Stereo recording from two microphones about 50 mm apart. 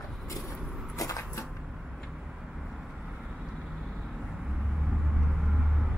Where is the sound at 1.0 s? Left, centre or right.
Left.